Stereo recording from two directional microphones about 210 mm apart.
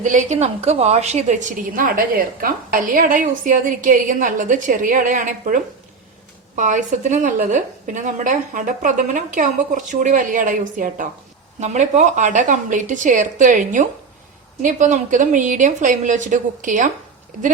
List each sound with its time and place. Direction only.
0.0 s a woman's voice: 35° right (ahead or behind)
6.6 s a woman's voice: 35° right (ahead or behind)